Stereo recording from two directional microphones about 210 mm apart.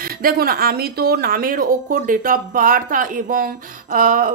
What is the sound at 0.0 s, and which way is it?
Speech, 45° right (ahead or behind).